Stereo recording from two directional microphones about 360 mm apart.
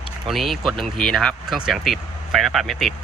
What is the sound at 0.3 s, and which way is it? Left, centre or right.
Speech, centre.